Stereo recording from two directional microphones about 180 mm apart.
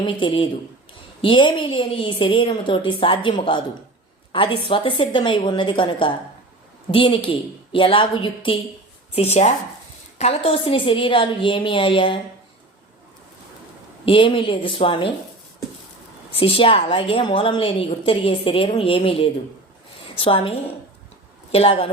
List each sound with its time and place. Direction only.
0.0 s a woman's voice: 25° left (ahead or behind)
14.0 s a woman's voice: 30° left (ahead or behind)
16.3 s a woman's voice: 30° left (ahead or behind)